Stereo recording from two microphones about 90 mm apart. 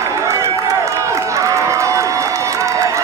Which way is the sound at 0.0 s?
35° right (ahead or behind).